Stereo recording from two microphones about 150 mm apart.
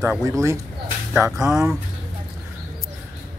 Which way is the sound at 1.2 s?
5° right (ahead or behind).